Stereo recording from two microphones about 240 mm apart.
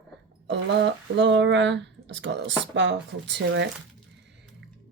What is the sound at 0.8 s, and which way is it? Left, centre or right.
A woman's voice, right.